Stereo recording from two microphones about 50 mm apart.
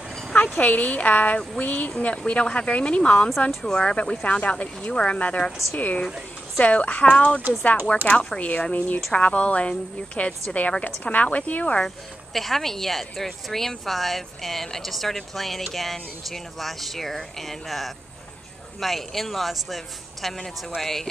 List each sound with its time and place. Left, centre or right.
0.3 s speech: left
12.4 s a woman's voice: centre